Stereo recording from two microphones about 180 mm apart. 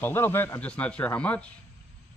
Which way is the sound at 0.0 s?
15° left (ahead or behind).